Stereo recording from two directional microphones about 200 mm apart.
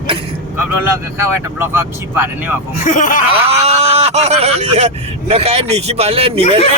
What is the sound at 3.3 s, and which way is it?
Speech, 30° right (ahead or behind).